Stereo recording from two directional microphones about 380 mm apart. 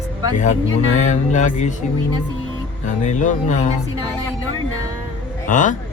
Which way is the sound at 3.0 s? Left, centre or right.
Centre.